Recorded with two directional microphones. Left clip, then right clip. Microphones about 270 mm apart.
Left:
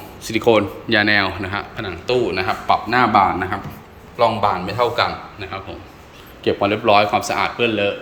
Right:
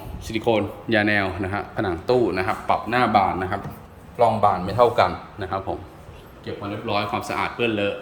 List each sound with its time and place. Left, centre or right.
0.3 s a man's voice: centre; by 5.7 s right
6.4 s speech: left
6.8 s speech: centre